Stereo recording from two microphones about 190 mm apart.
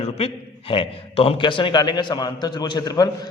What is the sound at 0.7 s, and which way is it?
A man's voice, 30° left (ahead or behind).